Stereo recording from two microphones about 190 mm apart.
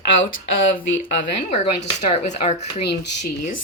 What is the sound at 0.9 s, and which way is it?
Speech, 40° left (ahead or behind).